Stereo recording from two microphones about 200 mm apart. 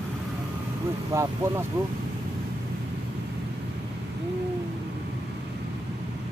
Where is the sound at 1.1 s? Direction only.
15° right (ahead or behind).